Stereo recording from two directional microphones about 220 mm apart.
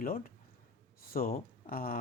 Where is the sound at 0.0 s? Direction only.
40° left (ahead or behind).